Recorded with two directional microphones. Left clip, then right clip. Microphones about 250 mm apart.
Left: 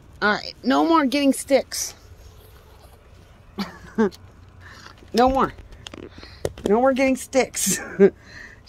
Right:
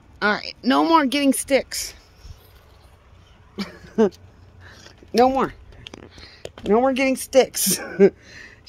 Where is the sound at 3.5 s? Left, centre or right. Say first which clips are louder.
Right 3 dB; centre.